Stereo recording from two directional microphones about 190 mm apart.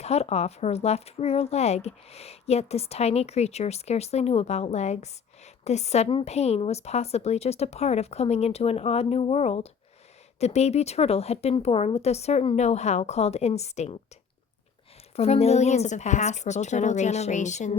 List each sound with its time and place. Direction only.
0.0 s speech: 35° left (ahead or behind)
15.1 s speech: 35° left (ahead or behind)